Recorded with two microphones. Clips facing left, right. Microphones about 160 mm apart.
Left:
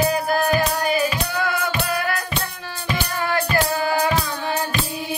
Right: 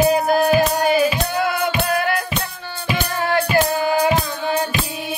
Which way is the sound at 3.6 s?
25° right (ahead or behind).